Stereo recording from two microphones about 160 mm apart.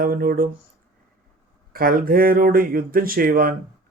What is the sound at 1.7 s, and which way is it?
Speech, 65° right (ahead or behind).